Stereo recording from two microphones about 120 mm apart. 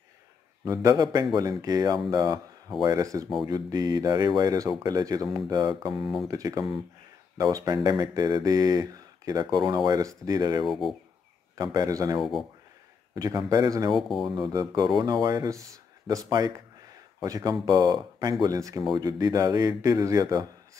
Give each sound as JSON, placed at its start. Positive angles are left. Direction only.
{"t": 0.7, "sound": "speech", "side_deg": -30}
{"t": 10.6, "sound": "speech", "side_deg": 0}
{"t": 11.5, "sound": "speech", "side_deg": -35}
{"t": 12.2, "sound": "speech", "side_deg": 0}
{"t": 13.1, "sound": "speech", "side_deg": -30}
{"t": 14.0, "sound": "speech", "side_deg": 0}
{"t": 14.3, "sound": "speech", "side_deg": -35}